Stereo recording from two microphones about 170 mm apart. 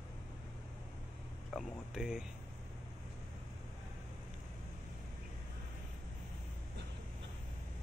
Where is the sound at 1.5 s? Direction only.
Centre (ahead or behind).